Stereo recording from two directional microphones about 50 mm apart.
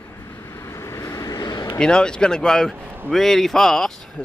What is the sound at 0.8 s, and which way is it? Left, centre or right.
Vehicle, left.